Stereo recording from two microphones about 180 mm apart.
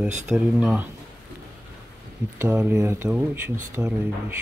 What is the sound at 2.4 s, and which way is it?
Speech, 10° right (ahead or behind).